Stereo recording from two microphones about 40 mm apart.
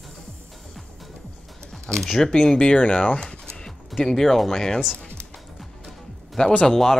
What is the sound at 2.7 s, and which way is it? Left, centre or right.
Speech, left.